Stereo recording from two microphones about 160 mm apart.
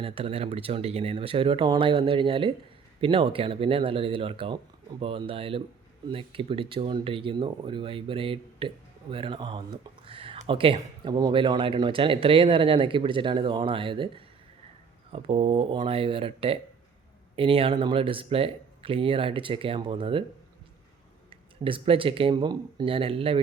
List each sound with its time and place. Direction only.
0.0 s speech: 35° right (ahead or behind)
21.2 s speech: 35° right (ahead or behind)